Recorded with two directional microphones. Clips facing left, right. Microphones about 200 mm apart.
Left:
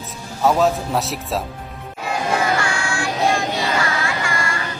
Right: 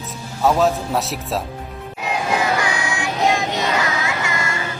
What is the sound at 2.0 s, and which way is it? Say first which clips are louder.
Child singing: even; 20° right (ahead or behind).